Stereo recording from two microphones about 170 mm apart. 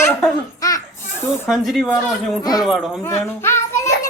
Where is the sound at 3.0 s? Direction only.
15° left (ahead or behind).